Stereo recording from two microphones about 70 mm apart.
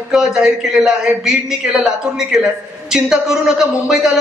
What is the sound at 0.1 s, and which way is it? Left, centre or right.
Speech, centre.